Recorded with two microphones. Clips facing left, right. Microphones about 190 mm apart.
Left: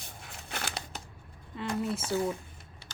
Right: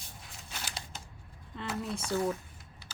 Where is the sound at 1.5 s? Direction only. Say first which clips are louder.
Left 4 dB; 5° left (ahead or behind).